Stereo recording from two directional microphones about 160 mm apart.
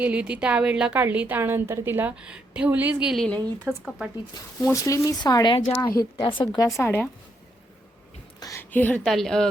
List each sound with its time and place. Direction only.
0.0 s a woman's voice: 10° right (ahead or behind)
4.6 s speech: 20° left (ahead or behind)
6.7 s a woman's voice: 15° left (ahead or behind)
8.4 s a woman's voice: 20° left (ahead or behind); by 9.5 s centre (ahead or behind)